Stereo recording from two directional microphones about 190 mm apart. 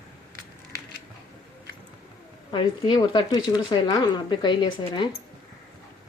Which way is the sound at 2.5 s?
25° left (ahead or behind).